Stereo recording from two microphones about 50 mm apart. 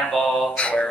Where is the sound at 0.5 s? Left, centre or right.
Left.